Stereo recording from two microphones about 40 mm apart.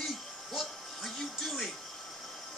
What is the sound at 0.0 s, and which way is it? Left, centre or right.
Music, centre.